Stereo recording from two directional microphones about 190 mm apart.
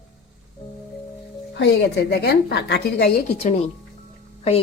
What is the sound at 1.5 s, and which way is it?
A woman's voice, 65° left (ahead or behind).